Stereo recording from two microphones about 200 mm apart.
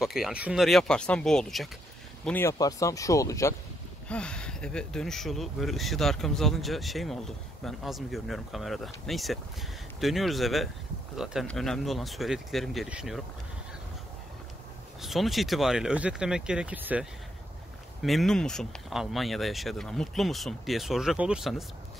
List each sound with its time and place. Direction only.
0.0 s speech: centre (ahead or behind); by 3.5 s 15° left (ahead or behind)
4.1 s speech: 5° left (ahead or behind)
15.0 s speech: centre (ahead or behind)